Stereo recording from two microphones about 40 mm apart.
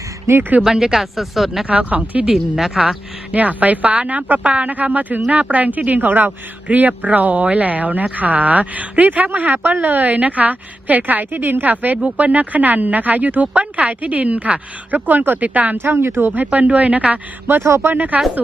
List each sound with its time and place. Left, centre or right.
0.6 s speech: centre
1.6 s speech: right
2.3 s speech: centre
3.3 s speech: right
15.4 s speech: right
15.8 s speech: right
16.3 s speech: right